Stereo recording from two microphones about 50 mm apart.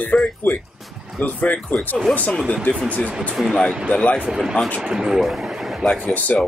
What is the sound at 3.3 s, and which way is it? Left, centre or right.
Speech, centre.